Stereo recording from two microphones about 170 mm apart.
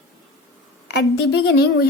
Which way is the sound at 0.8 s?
90° left.